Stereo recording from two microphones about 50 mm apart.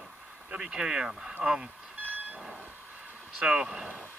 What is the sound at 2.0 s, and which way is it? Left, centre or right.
Train, right.